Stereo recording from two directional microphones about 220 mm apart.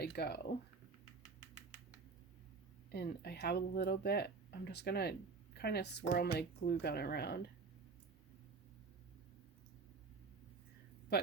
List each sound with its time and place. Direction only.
0.0 s speech: 45° left (ahead or behind)
2.9 s speech: 45° left (ahead or behind)